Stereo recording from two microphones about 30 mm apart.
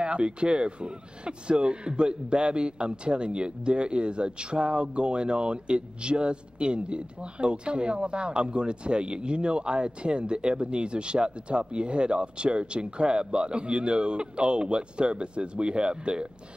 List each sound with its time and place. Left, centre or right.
0.0 s speech: right